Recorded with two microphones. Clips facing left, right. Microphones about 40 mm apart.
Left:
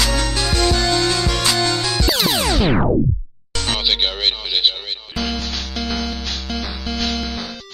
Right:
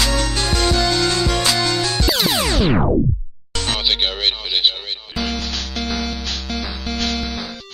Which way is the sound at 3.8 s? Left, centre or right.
Centre.